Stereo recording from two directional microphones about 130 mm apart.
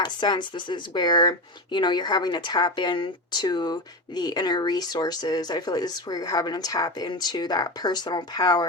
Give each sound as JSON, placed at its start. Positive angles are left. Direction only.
{"t": 0.0, "sound": "speech", "side_deg": 35}